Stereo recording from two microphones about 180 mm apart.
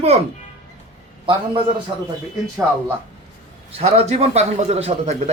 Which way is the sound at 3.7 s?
35° right (ahead or behind).